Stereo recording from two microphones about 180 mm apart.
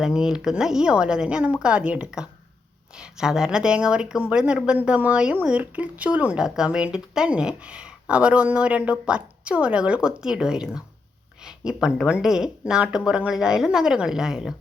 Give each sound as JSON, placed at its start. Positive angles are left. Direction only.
{"t": 0.0, "sound": "speech", "side_deg": -5}